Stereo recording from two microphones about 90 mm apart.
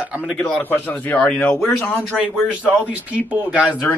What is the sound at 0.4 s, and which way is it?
A man's voice, 15° left (ahead or behind).